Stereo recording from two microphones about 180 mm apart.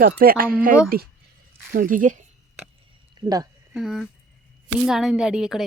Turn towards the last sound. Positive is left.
turn(degrees=0)  # may be behind; listen again after turning